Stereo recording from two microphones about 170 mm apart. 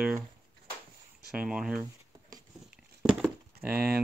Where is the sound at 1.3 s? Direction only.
5° right (ahead or behind).